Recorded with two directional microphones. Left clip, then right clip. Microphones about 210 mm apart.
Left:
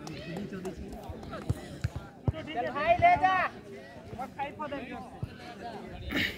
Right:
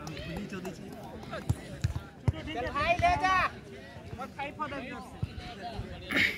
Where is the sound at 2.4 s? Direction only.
55° right (ahead or behind).